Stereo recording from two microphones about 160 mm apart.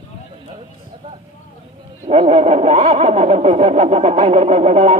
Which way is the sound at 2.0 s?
40° right (ahead or behind).